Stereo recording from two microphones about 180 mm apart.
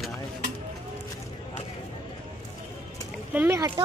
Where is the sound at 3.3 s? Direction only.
10° right (ahead or behind).